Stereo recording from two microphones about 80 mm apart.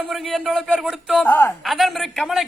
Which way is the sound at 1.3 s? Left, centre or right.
Left.